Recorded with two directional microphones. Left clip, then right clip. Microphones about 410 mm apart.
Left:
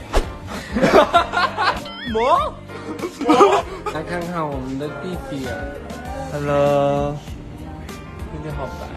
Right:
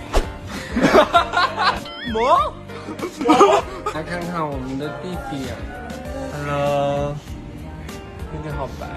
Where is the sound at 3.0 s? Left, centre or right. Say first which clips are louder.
Even; centre.